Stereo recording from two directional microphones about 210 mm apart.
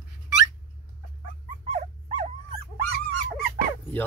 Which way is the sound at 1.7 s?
30° right (ahead or behind).